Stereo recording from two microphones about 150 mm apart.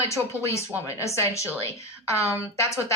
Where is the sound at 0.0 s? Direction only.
20° left (ahead or behind).